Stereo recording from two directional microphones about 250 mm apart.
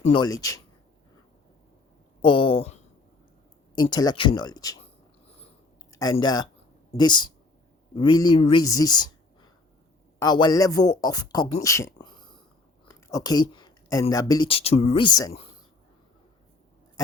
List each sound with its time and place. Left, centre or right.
0.1 s speech: centre
2.2 s speech: left
3.8 s speech: centre
5.9 s speech: centre